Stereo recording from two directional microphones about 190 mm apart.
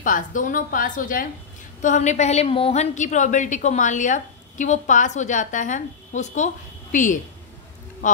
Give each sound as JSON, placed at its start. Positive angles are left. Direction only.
{"t": 0.0, "sound": "a woman's voice", "side_deg": 45}